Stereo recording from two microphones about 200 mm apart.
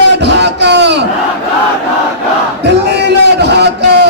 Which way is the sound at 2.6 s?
60° right (ahead or behind).